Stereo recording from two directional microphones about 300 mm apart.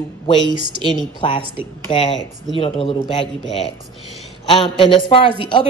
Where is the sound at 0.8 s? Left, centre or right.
Centre.